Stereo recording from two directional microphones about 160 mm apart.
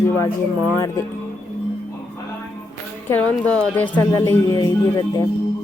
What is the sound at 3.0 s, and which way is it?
Speech, 10° left (ahead or behind).